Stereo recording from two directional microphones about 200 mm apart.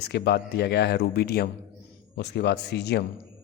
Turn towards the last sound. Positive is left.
turn(degrees=55)  # may be behind; listen again after turning